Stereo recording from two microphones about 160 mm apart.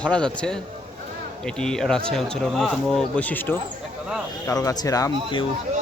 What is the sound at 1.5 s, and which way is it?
Speech, 5° left (ahead or behind).